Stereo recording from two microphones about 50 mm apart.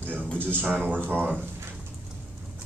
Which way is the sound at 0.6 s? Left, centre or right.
Right.